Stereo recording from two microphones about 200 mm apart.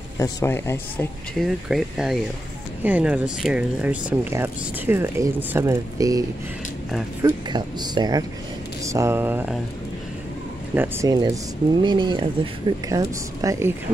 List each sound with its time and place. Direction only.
0.2 s speech: 15° left (ahead or behind)
1.4 s speech: centre (ahead or behind); by 6.2 s 15° right (ahead or behind)
6.9 s speech: centre (ahead or behind)
7.4 s speech: 20° right (ahead or behind)
10.7 s speech: 10° right (ahead or behind)